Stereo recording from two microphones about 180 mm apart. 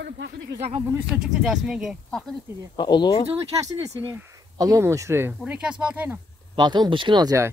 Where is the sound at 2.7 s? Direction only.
25° left (ahead or behind).